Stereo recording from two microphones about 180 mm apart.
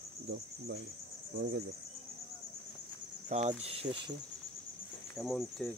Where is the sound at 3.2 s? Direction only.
40° right (ahead or behind).